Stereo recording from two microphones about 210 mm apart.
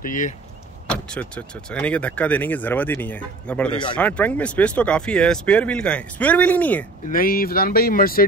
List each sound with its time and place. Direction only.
0.0 s speech: 40° left (ahead or behind)
0.8 s speech: 5° left (ahead or behind)
7.1 s speech: 45° left (ahead or behind)